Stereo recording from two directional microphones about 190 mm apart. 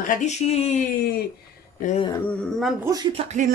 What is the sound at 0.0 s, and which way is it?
Speech, 40° left (ahead or behind).